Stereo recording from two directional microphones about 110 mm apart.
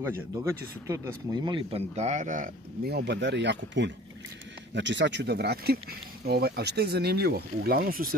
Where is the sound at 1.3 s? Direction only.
40° right (ahead or behind).